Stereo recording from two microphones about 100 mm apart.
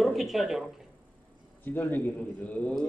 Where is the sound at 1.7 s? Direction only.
20° left (ahead or behind).